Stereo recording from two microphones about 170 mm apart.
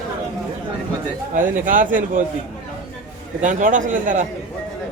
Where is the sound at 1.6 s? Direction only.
50° right (ahead or behind).